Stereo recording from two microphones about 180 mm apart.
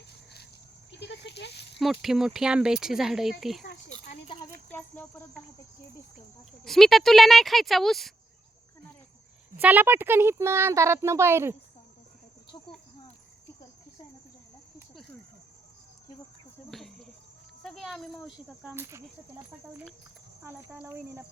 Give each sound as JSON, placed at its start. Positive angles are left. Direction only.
{"t": 0.9, "sound": "a sound", "side_deg": 75}
{"t": 1.8, "sound": "speech", "side_deg": 0}
{"t": 4.7, "sound": "speech", "side_deg": 10}
{"t": 6.7, "sound": "speech", "side_deg": 0}
{"t": 9.6, "sound": "speech", "side_deg": -10}
{"t": 16.7, "sound": "cricket", "side_deg": 0}
{"t": 17.6, "sound": "speech", "side_deg": 0}
{"t": 18.7, "sound": "speech", "side_deg": -15}
{"t": 20.4, "sound": "speech", "side_deg": -15}